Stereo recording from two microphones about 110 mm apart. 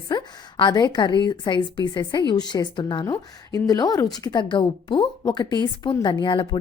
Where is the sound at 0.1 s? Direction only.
40° left (ahead or behind).